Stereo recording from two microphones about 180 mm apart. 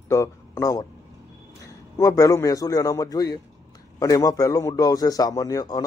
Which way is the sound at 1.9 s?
15° left (ahead or behind).